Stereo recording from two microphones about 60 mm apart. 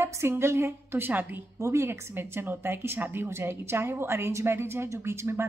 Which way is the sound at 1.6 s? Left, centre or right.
Right.